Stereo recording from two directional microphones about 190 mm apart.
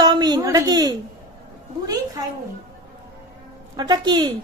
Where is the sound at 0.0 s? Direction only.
20° right (ahead or behind).